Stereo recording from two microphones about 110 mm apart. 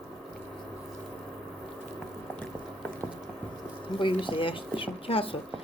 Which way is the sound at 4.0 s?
50° left (ahead or behind).